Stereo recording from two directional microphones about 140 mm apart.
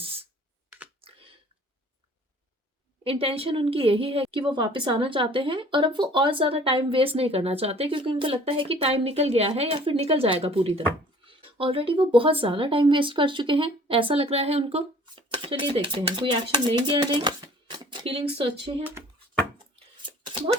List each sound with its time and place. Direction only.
0.0 s computer keyboard: 45° right (ahead or behind)
1.0 s a sound: 40° right (ahead or behind)
3.0 s speech: 45° right (ahead or behind)
18.8 s speech: 15° right (ahead or behind)